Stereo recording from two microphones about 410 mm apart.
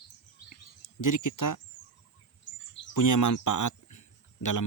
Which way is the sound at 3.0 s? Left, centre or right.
Left.